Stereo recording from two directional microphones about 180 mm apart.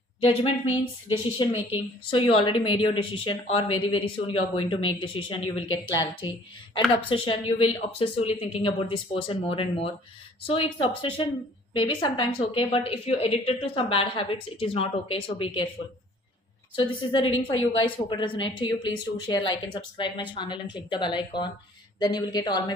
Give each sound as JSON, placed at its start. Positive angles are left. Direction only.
{"t": 0.2, "sound": "a woman's voice", "side_deg": 30}
{"t": 0.7, "sound": "a woman's voice", "side_deg": -10}
{"t": 1.4, "sound": "speech", "side_deg": 25}
{"t": 5.8, "sound": "a woman's voice", "side_deg": 90}
{"t": 6.9, "sound": "a woman's voice", "side_deg": 30}
{"t": 16.7, "sound": "speech", "side_deg": 30}
{"t": 17.2, "sound": "a woman's voice", "side_deg": 90}
{"t": 17.7, "sound": "speech", "side_deg": 30}